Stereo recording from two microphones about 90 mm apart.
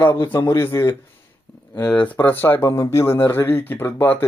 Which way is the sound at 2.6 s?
35° left (ahead or behind).